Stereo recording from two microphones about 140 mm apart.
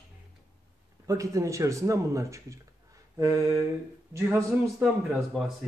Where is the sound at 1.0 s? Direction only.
25° right (ahead or behind).